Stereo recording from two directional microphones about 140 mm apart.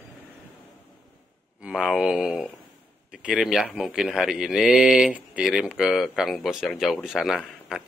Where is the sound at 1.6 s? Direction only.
5° right (ahead or behind).